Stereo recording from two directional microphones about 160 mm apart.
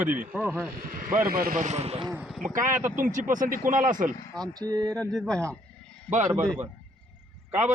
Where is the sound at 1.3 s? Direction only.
65° right (ahead or behind); by 2.1 s 40° right (ahead or behind).